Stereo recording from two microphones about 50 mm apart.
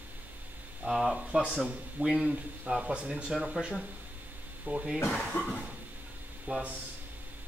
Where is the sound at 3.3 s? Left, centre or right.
Centre.